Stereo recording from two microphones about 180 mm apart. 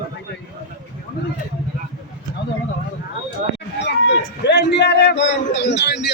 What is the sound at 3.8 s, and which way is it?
A man's voice, 75° left (ahead or behind).